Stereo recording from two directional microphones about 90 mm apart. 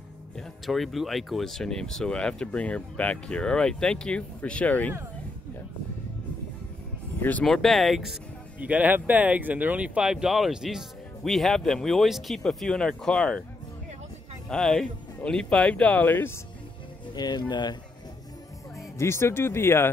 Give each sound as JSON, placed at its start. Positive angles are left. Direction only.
{"t": 0.4, "sound": "speech", "side_deg": 0}
{"t": 7.2, "sound": "speech", "side_deg": 20}
{"t": 7.4, "sound": "speech", "side_deg": 5}
{"t": 8.5, "sound": "speech", "side_deg": -15}
{"t": 14.5, "sound": "speech", "side_deg": 5}
{"t": 17.1, "sound": "speech", "side_deg": 50}
{"t": 18.9, "sound": "speech", "side_deg": 30}